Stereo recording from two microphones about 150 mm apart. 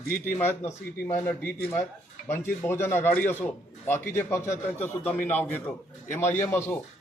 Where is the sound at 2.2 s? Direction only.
15° left (ahead or behind).